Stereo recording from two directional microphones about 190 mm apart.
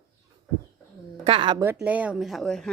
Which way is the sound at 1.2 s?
30° right (ahead or behind).